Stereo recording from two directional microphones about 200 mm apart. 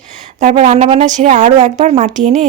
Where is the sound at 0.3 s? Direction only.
40° right (ahead or behind).